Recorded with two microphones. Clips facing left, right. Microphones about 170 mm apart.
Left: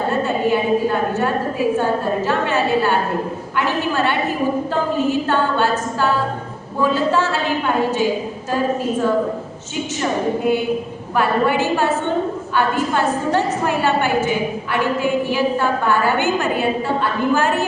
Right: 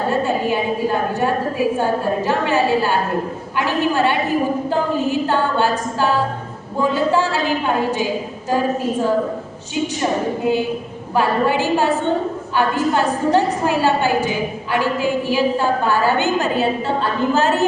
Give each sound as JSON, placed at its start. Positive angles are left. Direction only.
{"t": 3.9, "sound": "a woman's voice", "side_deg": -15}
{"t": 10.0, "sound": "a woman's voice", "side_deg": -20}
{"t": 12.5, "sound": "a woman's voice", "side_deg": -20}
{"t": 13.7, "sound": "a woman's voice", "side_deg": 20}
{"t": 17.3, "sound": "a woman's voice", "side_deg": -25}